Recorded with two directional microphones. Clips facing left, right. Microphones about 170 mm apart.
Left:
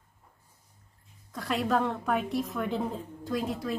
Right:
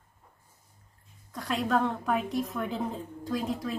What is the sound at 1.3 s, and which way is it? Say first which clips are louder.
A woman's voice: even; centre (ahead or behind).